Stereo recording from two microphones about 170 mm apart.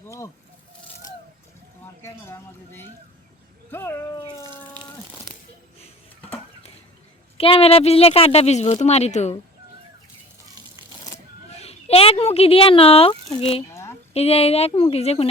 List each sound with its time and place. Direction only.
0.0 s speech: 15° left (ahead or behind)
2.0 s speech: 15° left (ahead or behind)
4.2 s speech: 25° left (ahead or behind)
7.3 s speech: 35° left (ahead or behind)
11.5 s a sound: 35° left (ahead or behind)
13.4 s speech: 35° left (ahead or behind)